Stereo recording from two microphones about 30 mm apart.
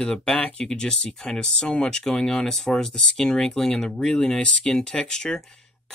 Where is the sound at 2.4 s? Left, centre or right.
Centre.